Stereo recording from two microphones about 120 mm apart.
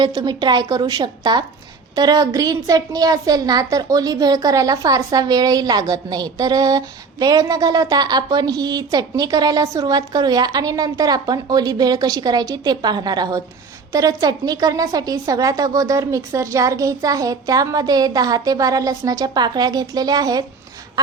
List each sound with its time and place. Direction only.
0.0 s a woman's voice: 35° right (ahead or behind)